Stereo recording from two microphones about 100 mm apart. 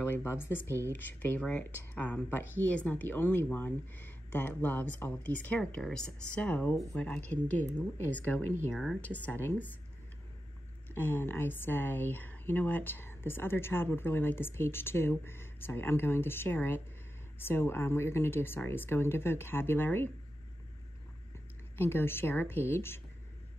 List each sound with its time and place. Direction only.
0.0 s speech: 25° left (ahead or behind)
11.0 s speech: 20° left (ahead or behind)
21.7 s speech: 25° left (ahead or behind)